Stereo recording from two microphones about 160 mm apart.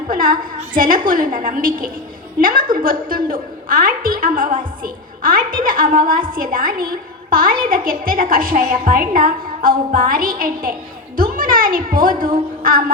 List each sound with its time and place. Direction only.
0.1 s a woman's voice: 60° right (ahead or behind)